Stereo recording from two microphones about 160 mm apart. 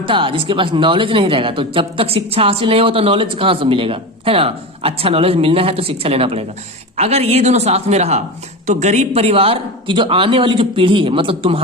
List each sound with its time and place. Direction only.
0.0 s speech: 30° right (ahead or behind)